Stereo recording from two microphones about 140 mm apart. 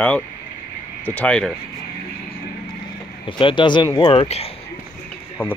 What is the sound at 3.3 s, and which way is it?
Speech, 35° left (ahead or behind).